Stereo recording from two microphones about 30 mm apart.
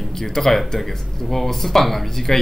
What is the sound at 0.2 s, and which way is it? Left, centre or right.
A man's voice, centre.